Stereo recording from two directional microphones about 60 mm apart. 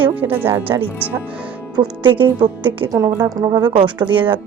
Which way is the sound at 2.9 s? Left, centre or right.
Right.